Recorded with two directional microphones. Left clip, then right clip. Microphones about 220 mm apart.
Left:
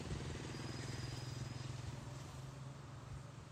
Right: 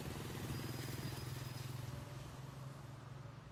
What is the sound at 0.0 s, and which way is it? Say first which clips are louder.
Vehicle: right 1 dB; 50° right (ahead or behind).